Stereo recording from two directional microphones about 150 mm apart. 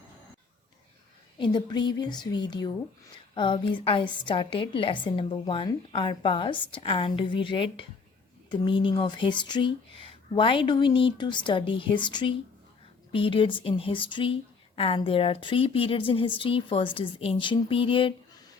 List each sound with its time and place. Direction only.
1.4 s a woman's voice: 30° left (ahead or behind)